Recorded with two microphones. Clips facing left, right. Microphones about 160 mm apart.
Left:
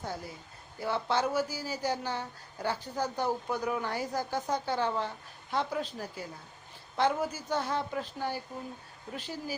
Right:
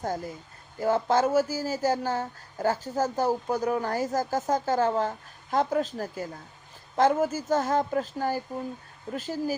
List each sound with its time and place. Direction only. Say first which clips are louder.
0.0 s speech: right 7 dB; 45° right (ahead or behind)